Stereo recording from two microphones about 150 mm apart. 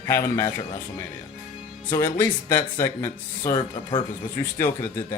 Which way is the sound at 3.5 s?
30° left (ahead or behind).